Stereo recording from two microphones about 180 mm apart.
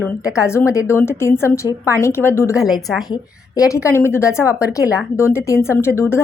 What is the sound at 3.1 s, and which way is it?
A woman's voice, 20° left (ahead or behind).